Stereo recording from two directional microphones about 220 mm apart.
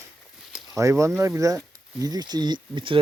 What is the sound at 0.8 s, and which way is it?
Speech, 15° right (ahead or behind).